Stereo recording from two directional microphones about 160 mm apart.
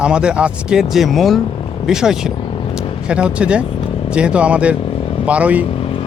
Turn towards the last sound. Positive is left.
turn(degrees=35)  # may be behind; listen again after turning